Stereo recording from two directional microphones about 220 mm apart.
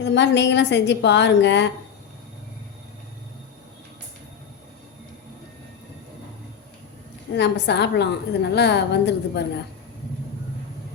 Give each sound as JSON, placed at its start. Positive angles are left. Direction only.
{"t": 0.0, "sound": "a woman's voice", "side_deg": 50}
{"t": 7.3, "sound": "a woman's voice", "side_deg": 50}